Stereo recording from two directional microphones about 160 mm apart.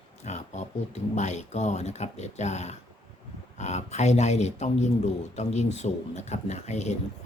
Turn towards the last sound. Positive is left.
turn(degrees=45)  # may be behind; listen again after turning